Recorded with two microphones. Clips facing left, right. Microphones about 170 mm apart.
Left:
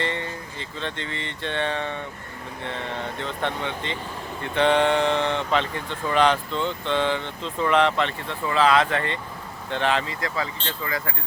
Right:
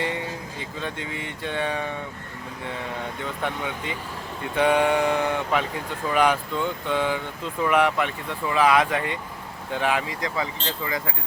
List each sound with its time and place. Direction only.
0.0 s music: 10° right (ahead or behind)
0.8 s speech: 10° right (ahead or behind)
3.4 s speech: 10° right (ahead or behind)